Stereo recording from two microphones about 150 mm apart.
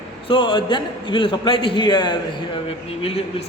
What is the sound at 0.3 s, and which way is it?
A man's voice, 35° left (ahead or behind).